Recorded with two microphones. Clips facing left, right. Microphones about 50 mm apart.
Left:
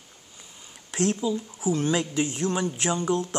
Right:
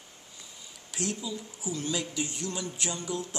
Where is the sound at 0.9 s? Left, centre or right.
Left.